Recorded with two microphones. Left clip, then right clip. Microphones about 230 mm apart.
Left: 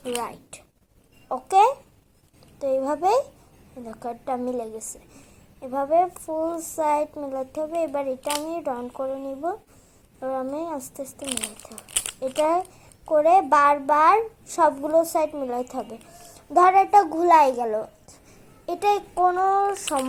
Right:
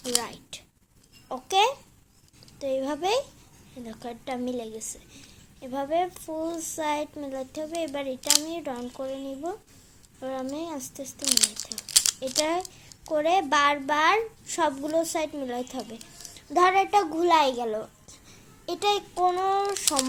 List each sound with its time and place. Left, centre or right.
0.0 s a woman's voice: centre